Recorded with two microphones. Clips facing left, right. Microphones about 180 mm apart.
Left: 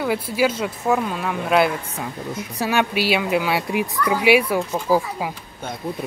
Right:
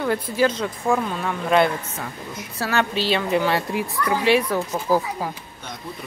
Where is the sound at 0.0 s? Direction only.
10° left (ahead or behind).